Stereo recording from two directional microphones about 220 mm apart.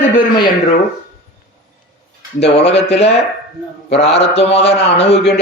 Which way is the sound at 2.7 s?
30° left (ahead or behind).